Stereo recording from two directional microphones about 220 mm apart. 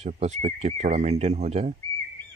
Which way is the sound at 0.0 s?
30° right (ahead or behind).